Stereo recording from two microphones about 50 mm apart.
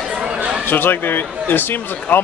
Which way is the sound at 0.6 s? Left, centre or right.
Left.